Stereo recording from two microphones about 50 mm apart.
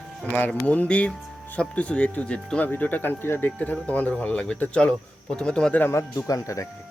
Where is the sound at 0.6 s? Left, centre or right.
Left.